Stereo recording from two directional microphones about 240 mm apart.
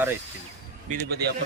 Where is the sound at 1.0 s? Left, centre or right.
Right.